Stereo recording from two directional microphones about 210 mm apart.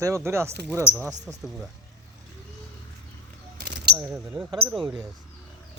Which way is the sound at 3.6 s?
50° right (ahead or behind).